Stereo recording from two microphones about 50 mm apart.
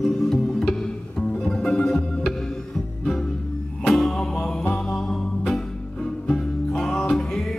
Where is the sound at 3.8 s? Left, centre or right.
Centre.